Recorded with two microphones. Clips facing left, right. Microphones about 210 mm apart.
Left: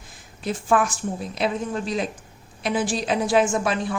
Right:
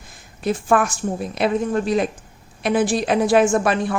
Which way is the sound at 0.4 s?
55° right (ahead or behind).